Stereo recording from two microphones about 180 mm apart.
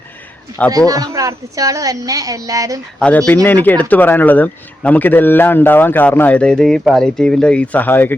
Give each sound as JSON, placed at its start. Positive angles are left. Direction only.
{"t": 0.9, "sound": "speech", "side_deg": -20}
{"t": 3.0, "sound": "speech", "side_deg": 5}